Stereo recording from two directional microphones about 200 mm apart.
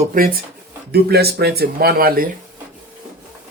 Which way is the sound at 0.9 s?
50° right (ahead or behind).